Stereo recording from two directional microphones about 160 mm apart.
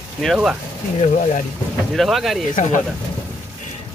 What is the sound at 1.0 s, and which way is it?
Speech, 40° left (ahead or behind).